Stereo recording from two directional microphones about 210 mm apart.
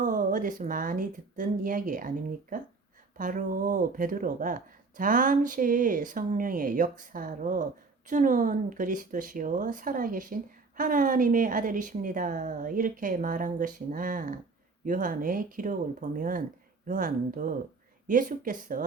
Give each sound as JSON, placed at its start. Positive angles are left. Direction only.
{"t": 0.0, "sound": "a woman's voice", "side_deg": -40}